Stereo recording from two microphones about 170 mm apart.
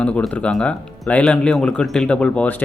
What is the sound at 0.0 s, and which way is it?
Speech, 5° left (ahead or behind).